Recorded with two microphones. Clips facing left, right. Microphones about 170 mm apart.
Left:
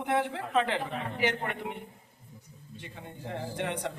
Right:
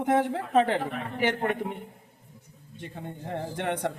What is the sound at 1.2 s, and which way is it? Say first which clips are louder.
Speech: right 5 dB; 50° right (ahead or behind).